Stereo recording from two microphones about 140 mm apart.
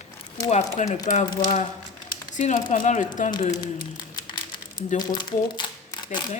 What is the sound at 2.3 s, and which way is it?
Speech, 65° left (ahead or behind).